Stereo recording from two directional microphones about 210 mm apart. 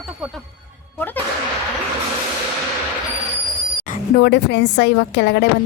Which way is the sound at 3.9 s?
50° left (ahead or behind).